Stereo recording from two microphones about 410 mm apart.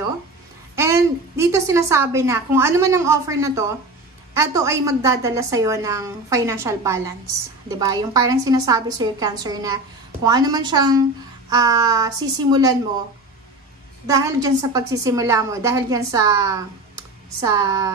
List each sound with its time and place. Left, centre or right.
0.7 s a woman's voice: centre
14.0 s a woman's voice: centre